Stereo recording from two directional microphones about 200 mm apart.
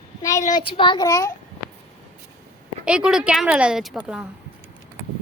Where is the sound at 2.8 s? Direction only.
5° right (ahead or behind).